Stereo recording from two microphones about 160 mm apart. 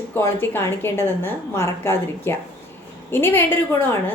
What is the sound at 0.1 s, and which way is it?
A woman's voice, 15° left (ahead or behind).